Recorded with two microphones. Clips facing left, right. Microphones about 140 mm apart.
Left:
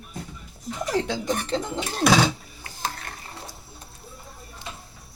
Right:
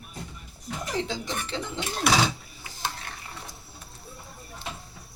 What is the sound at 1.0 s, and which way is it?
Speech, 55° left (ahead or behind).